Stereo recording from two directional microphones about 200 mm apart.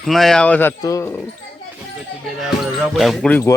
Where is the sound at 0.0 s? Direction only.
Centre (ahead or behind).